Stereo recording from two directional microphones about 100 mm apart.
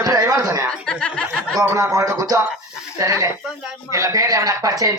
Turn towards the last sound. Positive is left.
turn(degrees=-35)  # may be behind; listen again after turning